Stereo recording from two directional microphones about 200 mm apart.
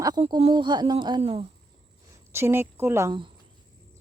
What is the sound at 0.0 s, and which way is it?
Speech, 20° right (ahead or behind).